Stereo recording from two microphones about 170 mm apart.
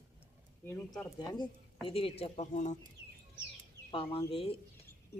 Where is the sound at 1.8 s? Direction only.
35° left (ahead or behind).